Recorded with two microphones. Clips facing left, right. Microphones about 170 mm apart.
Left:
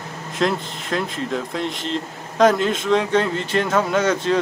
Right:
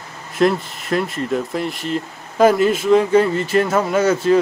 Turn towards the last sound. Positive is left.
turn(degrees=-5)  # may be behind; listen again after turning